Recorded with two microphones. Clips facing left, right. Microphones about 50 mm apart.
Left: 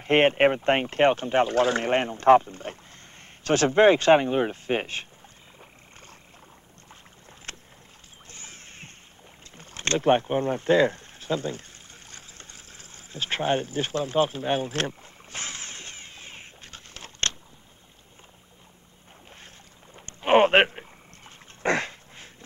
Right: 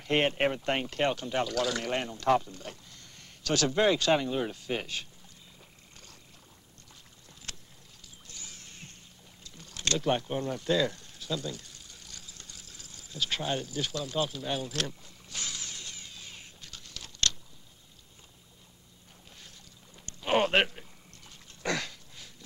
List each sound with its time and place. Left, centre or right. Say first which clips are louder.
0.0 s speech: left 8 dB; left
5.6 s frog: left 6 dB; left
7.5 s boat: left 4 dB; left
8.3 s rowboat: left 4 dB; left
9.6 s a sound: left 5 dB; left
20.1 s a sound: left 8 dB; left
21.6 s throat clearing: left 7 dB; left